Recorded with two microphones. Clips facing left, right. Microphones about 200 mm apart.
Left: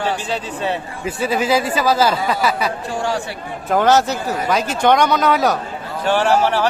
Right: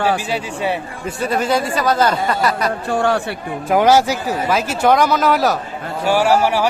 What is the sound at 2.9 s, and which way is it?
Speech, 60° right (ahead or behind).